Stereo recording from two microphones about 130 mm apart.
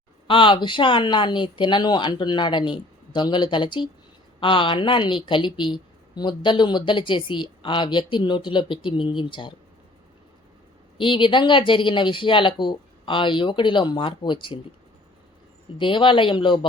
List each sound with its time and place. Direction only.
0.3 s a woman's voice: 40° left (ahead or behind)
10.9 s a woman's voice: 40° left (ahead or behind)
15.8 s a woman's voice: 40° left (ahead or behind)